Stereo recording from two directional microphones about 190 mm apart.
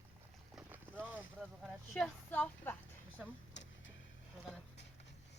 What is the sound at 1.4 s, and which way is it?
Speech, centre (ahead or behind).